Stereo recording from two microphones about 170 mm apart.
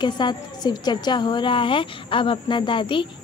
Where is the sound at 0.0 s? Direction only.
25° left (ahead or behind).